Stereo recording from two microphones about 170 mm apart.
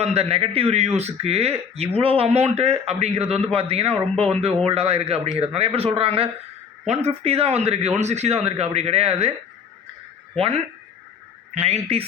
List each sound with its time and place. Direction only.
0.0 s speech: 35° right (ahead or behind)
10.3 s speech: 35° right (ahead or behind)